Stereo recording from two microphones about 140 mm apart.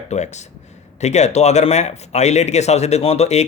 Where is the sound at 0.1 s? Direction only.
55° left (ahead or behind).